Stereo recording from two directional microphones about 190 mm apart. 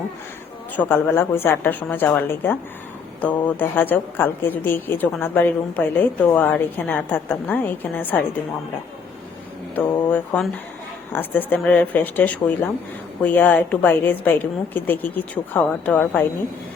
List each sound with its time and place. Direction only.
0.8 s a woman's voice: 10° left (ahead or behind)
9.8 s mantra: 20° left (ahead or behind)
10.1 s a woman's voice: 5° left (ahead or behind)